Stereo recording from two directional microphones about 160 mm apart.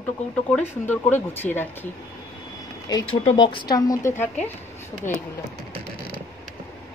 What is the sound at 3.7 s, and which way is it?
Speech, 20° left (ahead or behind).